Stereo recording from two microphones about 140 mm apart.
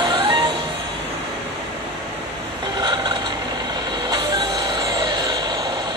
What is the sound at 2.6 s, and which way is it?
Vehicle, 35° right (ahead or behind).